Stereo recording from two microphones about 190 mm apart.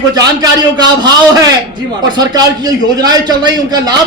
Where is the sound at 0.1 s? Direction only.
20° right (ahead or behind).